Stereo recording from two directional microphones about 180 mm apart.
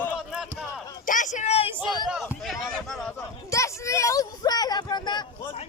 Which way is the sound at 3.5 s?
15° left (ahead or behind).